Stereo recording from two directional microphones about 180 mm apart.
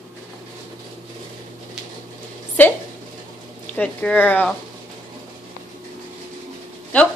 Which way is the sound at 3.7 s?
5° left (ahead or behind).